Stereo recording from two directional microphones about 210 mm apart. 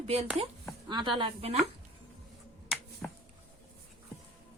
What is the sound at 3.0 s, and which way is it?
Finger snapping, 5° left (ahead or behind).